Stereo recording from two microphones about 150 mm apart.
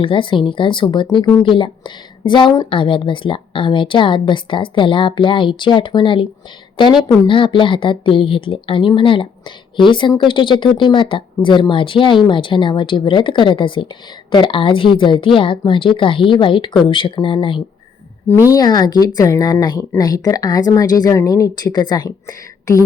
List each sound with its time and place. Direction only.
0.0 s a woman's voice: 35° left (ahead or behind)